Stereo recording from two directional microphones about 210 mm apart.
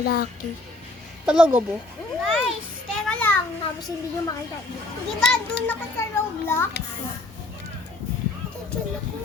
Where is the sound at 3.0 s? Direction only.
5° left (ahead or behind).